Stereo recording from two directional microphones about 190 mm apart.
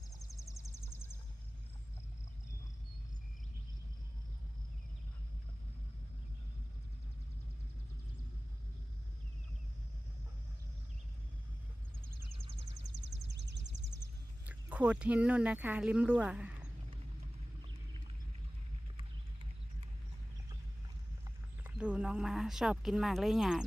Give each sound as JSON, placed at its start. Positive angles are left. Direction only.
{"t": 0.2, "sound": "a sound", "side_deg": 15}
{"t": 12.4, "sound": "a sound", "side_deg": -30}
{"t": 13.2, "sound": "music", "side_deg": -65}
{"t": 14.4, "sound": "speech", "side_deg": -5}
{"t": 18.9, "sound": "horse", "side_deg": -30}
{"t": 21.2, "sound": "speech", "side_deg": -5}